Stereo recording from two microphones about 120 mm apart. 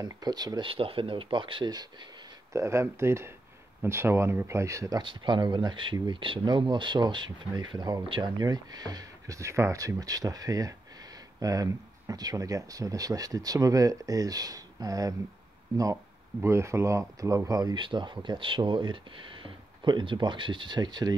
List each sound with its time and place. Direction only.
0.0 s speech: 35° right (ahead or behind)
2.5 s speech: 25° right (ahead or behind)
5.0 s speech: 40° right (ahead or behind)
16.3 s speech: 25° right (ahead or behind)